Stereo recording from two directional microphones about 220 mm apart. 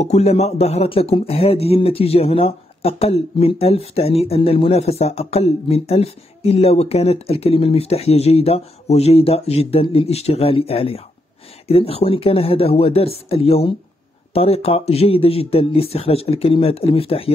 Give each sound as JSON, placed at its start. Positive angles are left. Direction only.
{"t": 0.0, "sound": "speech", "side_deg": 30}